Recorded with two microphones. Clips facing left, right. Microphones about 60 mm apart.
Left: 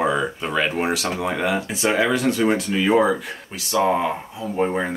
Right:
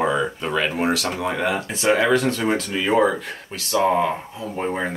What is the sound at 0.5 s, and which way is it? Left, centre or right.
Speech, centre.